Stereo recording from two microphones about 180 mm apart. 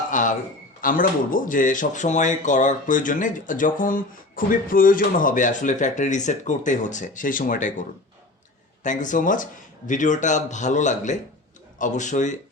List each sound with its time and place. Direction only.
0.1 s a man's voice: 45° left (ahead or behind)